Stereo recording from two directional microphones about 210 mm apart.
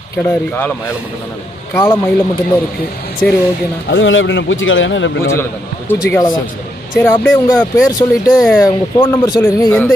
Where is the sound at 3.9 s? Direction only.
65° left (ahead or behind).